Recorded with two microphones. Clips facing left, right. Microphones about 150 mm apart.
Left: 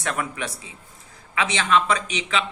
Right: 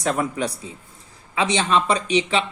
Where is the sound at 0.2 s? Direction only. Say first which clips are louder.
Right 5 dB; 35° right (ahead or behind).